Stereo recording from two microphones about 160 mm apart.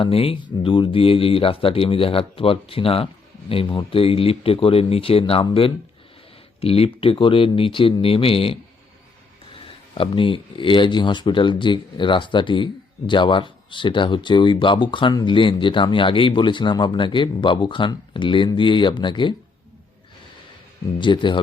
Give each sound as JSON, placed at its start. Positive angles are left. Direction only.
{"t": 0.0, "sound": "speech", "side_deg": 35}
{"t": 9.6, "sound": "speech", "side_deg": 35}
{"t": 21.0, "sound": "speech", "side_deg": 30}